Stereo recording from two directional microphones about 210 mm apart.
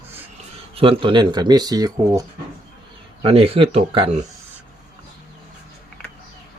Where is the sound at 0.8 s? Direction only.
25° right (ahead or behind).